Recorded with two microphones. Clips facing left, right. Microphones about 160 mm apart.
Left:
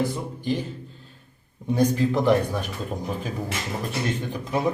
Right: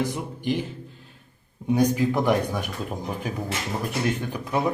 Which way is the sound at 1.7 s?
10° right (ahead or behind).